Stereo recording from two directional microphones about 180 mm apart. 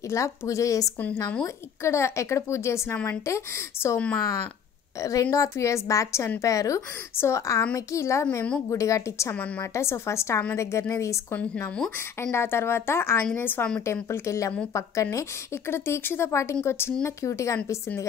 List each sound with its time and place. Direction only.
0.1 s a woman's voice: 15° left (ahead or behind)